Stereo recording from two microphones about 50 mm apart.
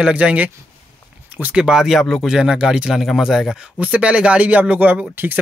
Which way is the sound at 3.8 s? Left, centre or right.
Right.